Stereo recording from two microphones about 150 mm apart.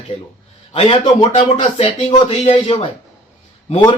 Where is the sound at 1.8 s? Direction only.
35° left (ahead or behind).